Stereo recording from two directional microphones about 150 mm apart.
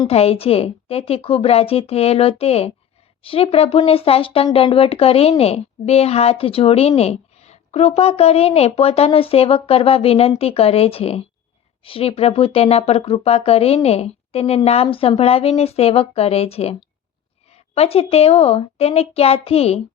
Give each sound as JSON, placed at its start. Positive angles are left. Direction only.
{"t": 0.1, "sound": "a woman's voice", "side_deg": 40}